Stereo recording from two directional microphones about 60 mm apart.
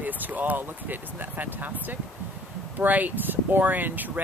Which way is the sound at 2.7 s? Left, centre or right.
Right.